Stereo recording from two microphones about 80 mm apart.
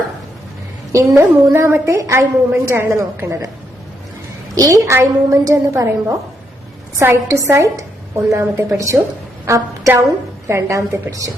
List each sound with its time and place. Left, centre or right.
0.9 s a woman's voice: right
4.5 s a woman's voice: right
7.0 s a woman's voice: right